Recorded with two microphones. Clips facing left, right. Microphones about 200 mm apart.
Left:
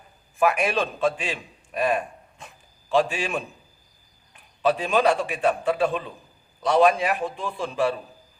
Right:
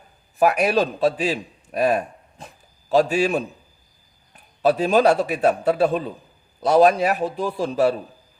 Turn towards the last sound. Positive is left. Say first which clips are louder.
# right 5 dB
turn(degrees=-40)  # may be behind; listen again after turning